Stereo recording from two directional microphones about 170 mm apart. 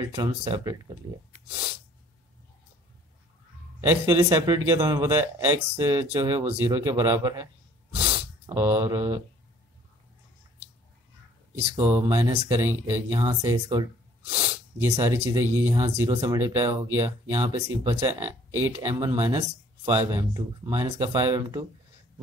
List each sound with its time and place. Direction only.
0.0 s speech: 20° right (ahead or behind)
0.3 s speech: 35° right (ahead or behind)
3.8 s speech: 15° right (ahead or behind)
8.5 s speech: 15° right (ahead or behind)
11.5 s speech: 35° right (ahead or behind)
11.9 s speech: 15° right (ahead or behind)
14.2 s sneeze: 35° right (ahead or behind)
14.8 s speech: 15° right (ahead or behind)